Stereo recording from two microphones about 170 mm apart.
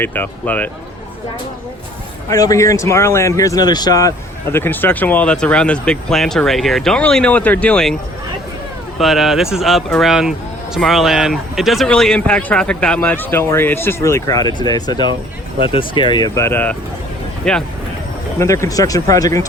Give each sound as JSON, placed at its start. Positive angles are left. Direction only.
{"t": 0.0, "sound": "speech", "side_deg": 10}
{"t": 2.3, "sound": "speech", "side_deg": 20}
{"t": 9.0, "sound": "speech", "side_deg": 0}
{"t": 18.3, "sound": "speech", "side_deg": 15}